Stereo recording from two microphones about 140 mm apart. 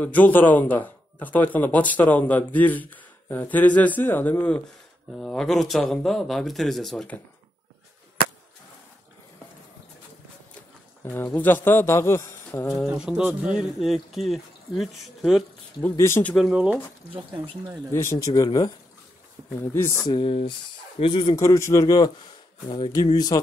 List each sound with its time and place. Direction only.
0.0 s speech: 10° left (ahead or behind)
11.1 s speech: 15° left (ahead or behind)
12.6 s speech: centre (ahead or behind)
15.8 s speech: 15° left (ahead or behind)
16.3 s speech: 5° right (ahead or behind)
17.9 s a man's voice: 20° left (ahead or behind)
19.6 s a man's voice: 20° left (ahead or behind)
20.1 s speech: 40° left (ahead or behind)
21.4 s a man's voice: 20° left (ahead or behind)
23.1 s a man's voice: 30° left (ahead or behind)